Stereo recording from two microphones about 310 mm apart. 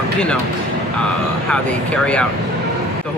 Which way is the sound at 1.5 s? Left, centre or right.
Centre.